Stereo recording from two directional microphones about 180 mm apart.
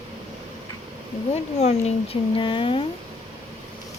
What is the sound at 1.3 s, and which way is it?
Speech, 35° left (ahead or behind).